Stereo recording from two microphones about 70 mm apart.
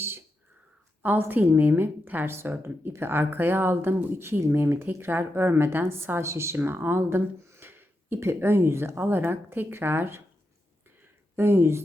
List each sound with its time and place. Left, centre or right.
1.0 s a woman's voice: right
11.3 s speech: right